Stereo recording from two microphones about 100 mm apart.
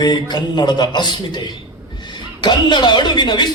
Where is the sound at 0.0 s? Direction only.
45° left (ahead or behind).